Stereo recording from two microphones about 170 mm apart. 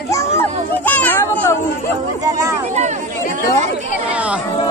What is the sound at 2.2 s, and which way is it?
Speech, 20° right (ahead or behind).